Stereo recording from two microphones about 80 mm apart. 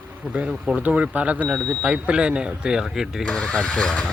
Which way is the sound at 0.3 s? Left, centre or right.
Centre.